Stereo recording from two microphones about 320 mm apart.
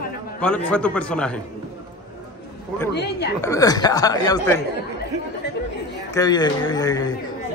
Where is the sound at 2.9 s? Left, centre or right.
Left.